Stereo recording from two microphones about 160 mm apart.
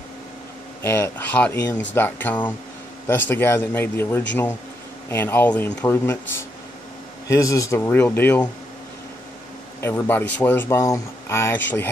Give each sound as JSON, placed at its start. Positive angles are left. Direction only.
{"t": 0.8, "sound": "speech", "side_deg": 15}
{"t": 7.2, "sound": "speech", "side_deg": 20}
{"t": 9.8, "sound": "speech", "side_deg": 15}